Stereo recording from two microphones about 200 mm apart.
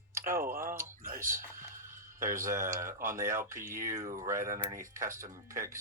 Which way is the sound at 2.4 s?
15° right (ahead or behind).